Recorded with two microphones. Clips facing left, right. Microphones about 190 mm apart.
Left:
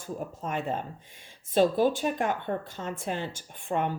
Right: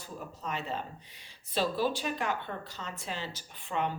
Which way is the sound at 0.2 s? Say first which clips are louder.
Left 3 dB; 50° left (ahead or behind).